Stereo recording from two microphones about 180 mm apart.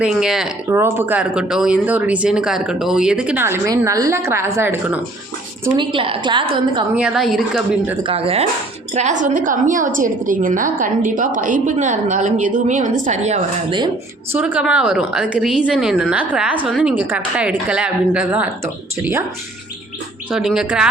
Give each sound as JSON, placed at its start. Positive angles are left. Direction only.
{"t": 0.0, "sound": "a woman's voice", "side_deg": -5}
{"t": 0.7, "sound": "a woman's voice", "side_deg": -15}
{"t": 5.7, "sound": "a woman's voice", "side_deg": -30}
{"t": 6.9, "sound": "a woman's voice", "side_deg": -5}
{"t": 8.0, "sound": "a woman's voice", "side_deg": -35}
{"t": 14.3, "sound": "a woman's voice", "side_deg": -5}
{"t": 20.3, "sound": "a woman's voice", "side_deg": 0}